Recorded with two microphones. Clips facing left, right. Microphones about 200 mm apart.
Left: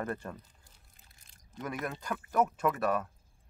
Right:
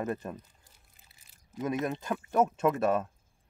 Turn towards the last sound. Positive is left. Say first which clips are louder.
# right 4 dB
turn(degrees=-25)  # may be behind; listen again after turning